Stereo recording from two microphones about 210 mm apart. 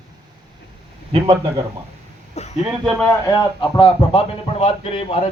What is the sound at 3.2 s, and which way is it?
Speech, 20° left (ahead or behind).